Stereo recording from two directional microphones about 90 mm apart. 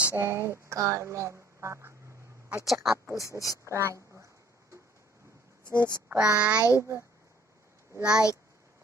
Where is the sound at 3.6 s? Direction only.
30° right (ahead or behind).